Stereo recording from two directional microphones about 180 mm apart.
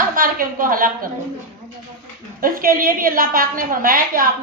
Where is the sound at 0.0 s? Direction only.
50° right (ahead or behind).